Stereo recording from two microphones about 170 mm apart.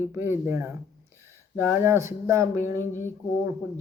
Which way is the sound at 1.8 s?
15° right (ahead or behind).